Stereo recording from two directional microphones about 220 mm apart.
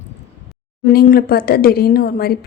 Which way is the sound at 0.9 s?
45° left (ahead or behind).